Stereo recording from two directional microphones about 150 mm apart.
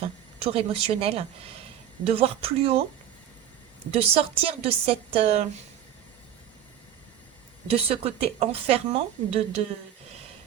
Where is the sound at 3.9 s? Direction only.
40° right (ahead or behind).